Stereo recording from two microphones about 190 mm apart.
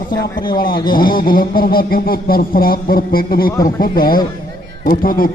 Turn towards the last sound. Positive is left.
turn(degrees=50)  # may be behind; listen again after turning